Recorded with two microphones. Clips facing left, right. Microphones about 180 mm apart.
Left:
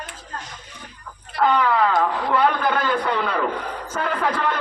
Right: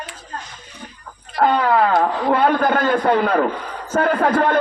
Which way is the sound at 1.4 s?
45° right (ahead or behind).